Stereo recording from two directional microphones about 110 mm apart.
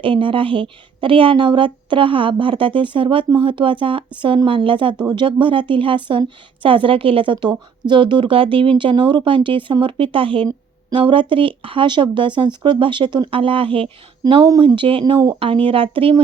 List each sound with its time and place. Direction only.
0.0 s speech: 50° right (ahead or behind)